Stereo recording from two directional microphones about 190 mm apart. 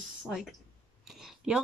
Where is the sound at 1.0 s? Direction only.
Centre (ahead or behind).